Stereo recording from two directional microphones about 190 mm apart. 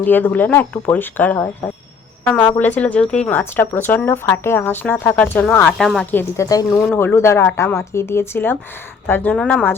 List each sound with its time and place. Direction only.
0.0 s speech: 10° left (ahead or behind)
2.5 s speech: 10° left (ahead or behind)
6.7 s speech: 5° left (ahead or behind)